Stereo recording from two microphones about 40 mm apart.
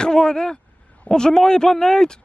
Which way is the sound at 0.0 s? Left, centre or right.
Centre.